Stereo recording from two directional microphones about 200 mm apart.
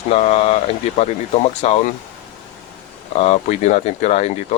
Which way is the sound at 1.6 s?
35° left (ahead or behind).